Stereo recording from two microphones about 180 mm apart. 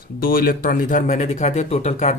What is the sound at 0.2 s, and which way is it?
Speech, 55° left (ahead or behind).